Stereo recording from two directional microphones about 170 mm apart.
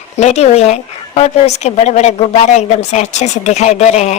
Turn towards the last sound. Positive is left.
turn(degrees=40)  # may be behind; listen again after turning